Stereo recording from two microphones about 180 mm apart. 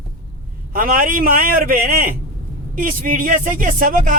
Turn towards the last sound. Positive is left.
turn(degrees=-50)  # may be behind; listen again after turning